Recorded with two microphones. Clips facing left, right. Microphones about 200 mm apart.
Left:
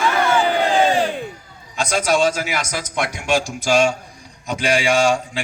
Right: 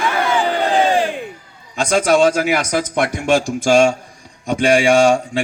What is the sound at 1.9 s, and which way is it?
Speech, 55° right (ahead or behind).